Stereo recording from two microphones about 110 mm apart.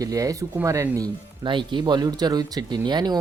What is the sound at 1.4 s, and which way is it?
Speech, 45° right (ahead or behind).